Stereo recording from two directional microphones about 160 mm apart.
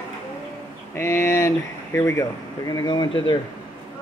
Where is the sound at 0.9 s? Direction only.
15° left (ahead or behind).